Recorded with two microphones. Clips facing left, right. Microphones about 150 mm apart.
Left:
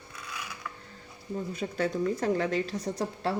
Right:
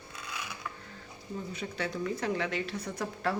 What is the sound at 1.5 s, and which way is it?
A woman's voice, 45° left (ahead or behind).